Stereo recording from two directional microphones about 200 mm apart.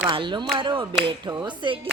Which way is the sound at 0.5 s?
25° right (ahead or behind).